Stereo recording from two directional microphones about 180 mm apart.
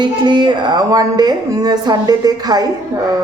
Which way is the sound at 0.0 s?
25° right (ahead or behind).